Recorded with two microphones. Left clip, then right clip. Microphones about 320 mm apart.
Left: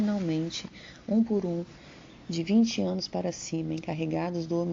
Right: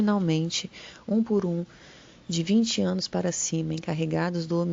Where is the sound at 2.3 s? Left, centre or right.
Right.